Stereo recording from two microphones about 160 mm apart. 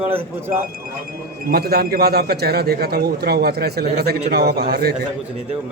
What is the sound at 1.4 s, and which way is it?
A man's voice, 75° right (ahead or behind).